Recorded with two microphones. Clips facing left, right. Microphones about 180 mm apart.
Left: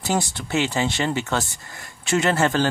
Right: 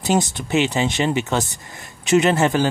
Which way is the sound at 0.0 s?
20° right (ahead or behind).